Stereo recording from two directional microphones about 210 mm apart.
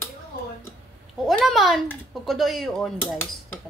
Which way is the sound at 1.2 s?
Centre (ahead or behind).